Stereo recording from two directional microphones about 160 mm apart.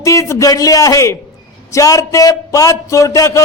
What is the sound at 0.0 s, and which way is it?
Speech, 20° left (ahead or behind).